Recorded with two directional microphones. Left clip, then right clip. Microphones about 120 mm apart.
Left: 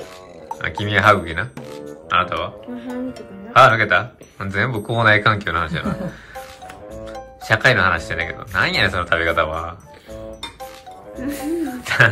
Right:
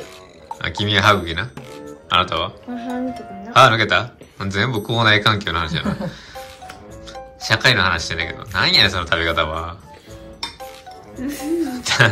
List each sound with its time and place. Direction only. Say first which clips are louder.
0.6 s speech: right 1 dB; 10° right (ahead or behind)
2.0 s speech: right 1 dB; 15° right (ahead or behind)
7.1 s speech: even; 5° right (ahead or behind)
11.1 s speech: right 1 dB; centre (ahead or behind)